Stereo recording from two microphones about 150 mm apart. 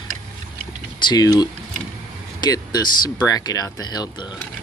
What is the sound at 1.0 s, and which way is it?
Speech, 25° left (ahead or behind).